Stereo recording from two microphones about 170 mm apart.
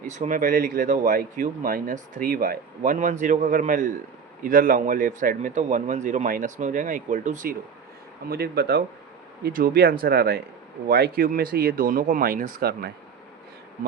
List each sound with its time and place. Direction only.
0.0 s speech: 45° right (ahead or behind)
8.3 s speech: 70° right (ahead or behind)
9.4 s speech: 55° right (ahead or behind)